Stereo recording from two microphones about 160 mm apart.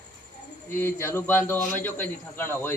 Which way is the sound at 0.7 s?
15° left (ahead or behind).